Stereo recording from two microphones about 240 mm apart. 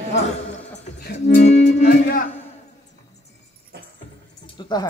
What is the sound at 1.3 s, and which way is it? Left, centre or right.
Speech, left.